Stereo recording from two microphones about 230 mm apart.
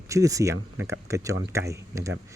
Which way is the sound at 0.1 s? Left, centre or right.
Centre.